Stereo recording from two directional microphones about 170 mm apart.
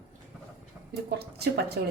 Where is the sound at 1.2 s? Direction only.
70° right (ahead or behind).